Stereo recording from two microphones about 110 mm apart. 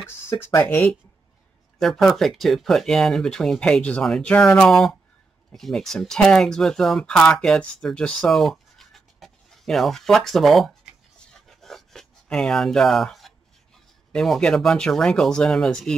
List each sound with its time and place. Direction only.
0.0 s speech: 25° left (ahead or behind)
1.8 s speech: centre (ahead or behind)
11.1 s a sound: 5° left (ahead or behind)
14.1 s speech: 5° left (ahead or behind)